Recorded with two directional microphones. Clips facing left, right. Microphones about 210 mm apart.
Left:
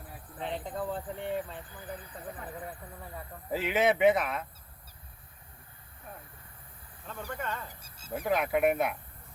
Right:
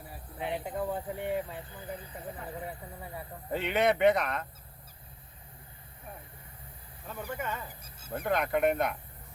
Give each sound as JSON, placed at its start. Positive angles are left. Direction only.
{"t": 0.3, "sound": "speech", "side_deg": -10}
{"t": 1.6, "sound": "speech", "side_deg": -25}
{"t": 2.6, "sound": "speech", "side_deg": -10}
{"t": 3.5, "sound": "speech", "side_deg": 5}
{"t": 7.1, "sound": "speech", "side_deg": -10}
{"t": 7.8, "sound": "cricket", "side_deg": -55}
{"t": 8.1, "sound": "speech", "side_deg": 5}